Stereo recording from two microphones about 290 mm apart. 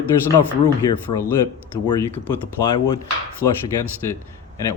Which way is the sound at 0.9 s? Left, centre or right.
Centre.